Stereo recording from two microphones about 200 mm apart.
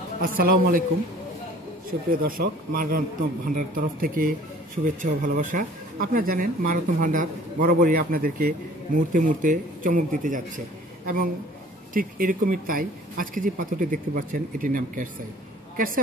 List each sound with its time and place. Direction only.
0.2 s speech: 45° right (ahead or behind)
1.9 s speech: 45° right (ahead or behind)
11.9 s speech: 45° right (ahead or behind)